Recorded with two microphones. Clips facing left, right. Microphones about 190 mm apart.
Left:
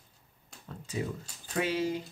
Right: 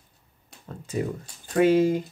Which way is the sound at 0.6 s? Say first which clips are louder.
Right 6 dB; 50° right (ahead or behind).